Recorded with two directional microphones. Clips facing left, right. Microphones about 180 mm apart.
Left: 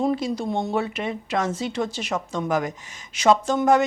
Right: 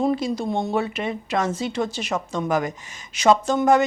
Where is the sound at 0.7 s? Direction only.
15° right (ahead or behind).